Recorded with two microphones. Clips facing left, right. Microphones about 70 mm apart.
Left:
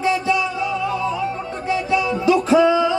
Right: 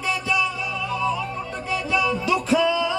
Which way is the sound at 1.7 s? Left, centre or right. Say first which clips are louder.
Left 3 dB; left.